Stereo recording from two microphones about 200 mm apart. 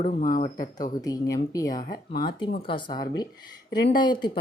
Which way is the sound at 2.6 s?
25° left (ahead or behind).